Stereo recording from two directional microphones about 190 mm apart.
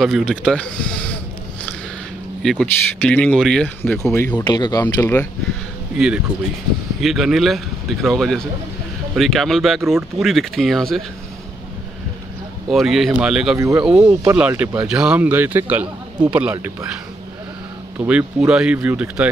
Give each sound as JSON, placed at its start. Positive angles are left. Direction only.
{"t": 0.0, "sound": "a man's voice", "side_deg": 0}
{"t": 2.4, "sound": "speech", "side_deg": 5}
{"t": 4.8, "sound": "speech", "side_deg": 10}
{"t": 5.9, "sound": "a man's voice", "side_deg": -5}
{"t": 12.7, "sound": "a man's voice", "side_deg": 0}